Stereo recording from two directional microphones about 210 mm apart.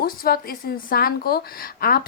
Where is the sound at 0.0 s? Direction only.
45° left (ahead or behind).